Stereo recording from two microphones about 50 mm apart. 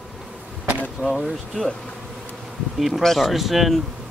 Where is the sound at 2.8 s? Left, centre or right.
Centre.